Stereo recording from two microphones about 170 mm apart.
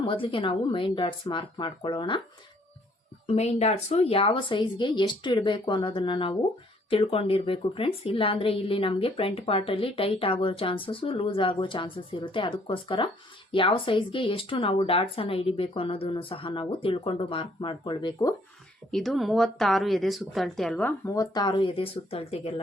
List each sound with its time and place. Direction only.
0.0 s a woman's voice: 30° left (ahead or behind)
3.2 s a woman's voice: 40° left (ahead or behind); by 18.3 s 25° left (ahead or behind)
18.9 s a woman's voice: centre (ahead or behind); by 22.6 s 35° left (ahead or behind)